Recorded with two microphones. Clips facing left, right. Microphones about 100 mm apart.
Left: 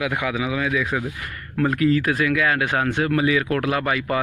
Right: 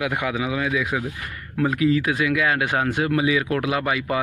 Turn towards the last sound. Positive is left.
turn(degrees=-20)  # may be behind; listen again after turning